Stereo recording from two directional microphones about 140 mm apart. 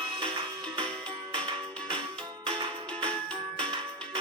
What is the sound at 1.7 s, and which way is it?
Music, 10° left (ahead or behind).